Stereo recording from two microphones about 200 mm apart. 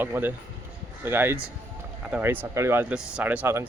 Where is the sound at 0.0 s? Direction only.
10° right (ahead or behind).